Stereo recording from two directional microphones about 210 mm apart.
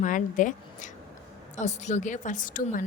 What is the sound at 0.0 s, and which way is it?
A woman's voice, 40° left (ahead or behind).